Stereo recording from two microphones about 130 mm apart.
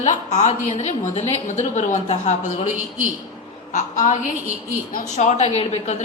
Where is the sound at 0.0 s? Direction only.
65° left (ahead or behind).